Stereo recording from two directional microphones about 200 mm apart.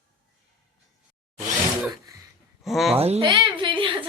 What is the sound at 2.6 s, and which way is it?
Speech, centre (ahead or behind).